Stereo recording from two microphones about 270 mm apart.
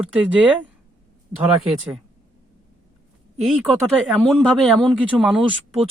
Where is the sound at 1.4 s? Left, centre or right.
Right.